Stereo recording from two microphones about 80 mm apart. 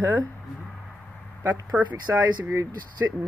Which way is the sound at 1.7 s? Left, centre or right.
Centre.